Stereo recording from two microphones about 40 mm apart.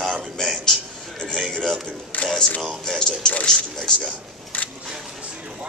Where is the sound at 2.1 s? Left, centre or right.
Left.